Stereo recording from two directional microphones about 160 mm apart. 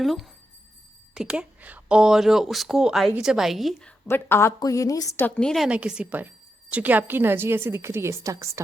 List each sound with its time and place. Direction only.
0.0 s speech: centre (ahead or behind)
4.1 s a woman's voice: 15° left (ahead or behind)
5.6 s a woman's voice: 5° right (ahead or behind)